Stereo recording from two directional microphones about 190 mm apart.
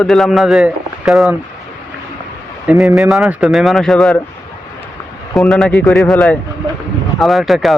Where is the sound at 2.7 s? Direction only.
Centre (ahead or behind).